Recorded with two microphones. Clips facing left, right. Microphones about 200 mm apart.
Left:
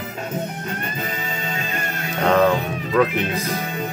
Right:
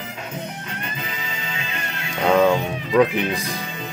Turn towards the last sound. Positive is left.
turn(degrees=-15)  # may be behind; listen again after turning